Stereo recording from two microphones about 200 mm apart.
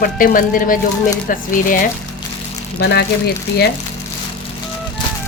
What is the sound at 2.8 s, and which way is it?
Speech, 55° left (ahead or behind).